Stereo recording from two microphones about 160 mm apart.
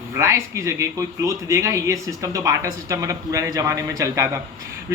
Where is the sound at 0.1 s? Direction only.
15° right (ahead or behind).